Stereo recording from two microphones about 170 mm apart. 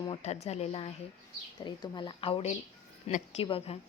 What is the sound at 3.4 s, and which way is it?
Speech, 35° left (ahead or behind).